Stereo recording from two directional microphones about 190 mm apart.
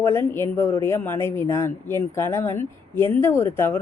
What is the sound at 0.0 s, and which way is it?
Speech, 15° left (ahead or behind).